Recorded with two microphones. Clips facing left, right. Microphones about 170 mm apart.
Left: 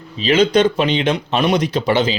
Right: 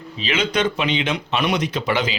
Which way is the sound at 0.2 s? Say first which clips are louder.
Left 8 dB; 35° left (ahead or behind).